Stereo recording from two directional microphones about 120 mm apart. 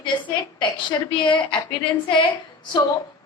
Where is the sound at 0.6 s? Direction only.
40° left (ahead or behind).